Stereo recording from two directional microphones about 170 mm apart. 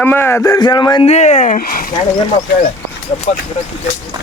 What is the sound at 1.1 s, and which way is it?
Speech, 45° left (ahead or behind).